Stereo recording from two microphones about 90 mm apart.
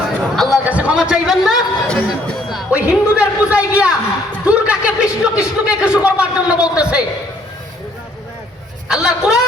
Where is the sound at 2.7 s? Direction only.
10° right (ahead or behind).